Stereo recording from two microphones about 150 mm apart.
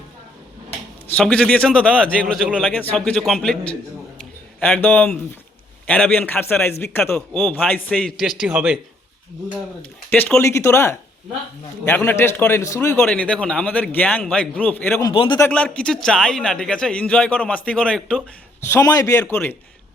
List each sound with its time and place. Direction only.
1.1 s a man's voice: 5° left (ahead or behind)
8.5 s speech: 15° right (ahead or behind)
10.1 s a man's voice: 10° left (ahead or behind)
15.1 s a man's voice: 35° left (ahead or behind)
15.4 s a man's voice: 10° left (ahead or behind)
18.7 s a man's voice: 25° left (ahead or behind)
19.2 s a man's voice: 10° left (ahead or behind)